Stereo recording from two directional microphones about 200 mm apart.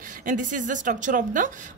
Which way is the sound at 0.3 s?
40° right (ahead or behind).